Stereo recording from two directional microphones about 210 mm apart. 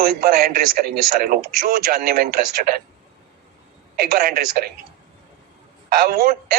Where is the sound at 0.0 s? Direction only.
45° right (ahead or behind).